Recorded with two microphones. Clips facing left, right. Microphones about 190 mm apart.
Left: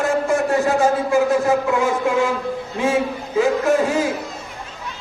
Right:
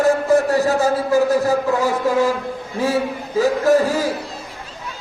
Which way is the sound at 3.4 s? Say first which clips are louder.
Right 2 dB; 40° right (ahead or behind).